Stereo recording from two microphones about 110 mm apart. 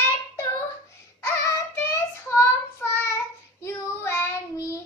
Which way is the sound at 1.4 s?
25° left (ahead or behind).